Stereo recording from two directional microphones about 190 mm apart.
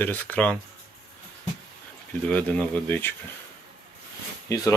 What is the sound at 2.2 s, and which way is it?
Speech, 10° left (ahead or behind).